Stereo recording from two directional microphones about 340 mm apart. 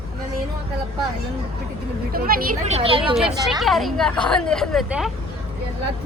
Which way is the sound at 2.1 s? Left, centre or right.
Right.